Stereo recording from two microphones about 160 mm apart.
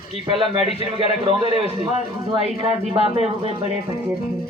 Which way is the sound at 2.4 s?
40° left (ahead or behind).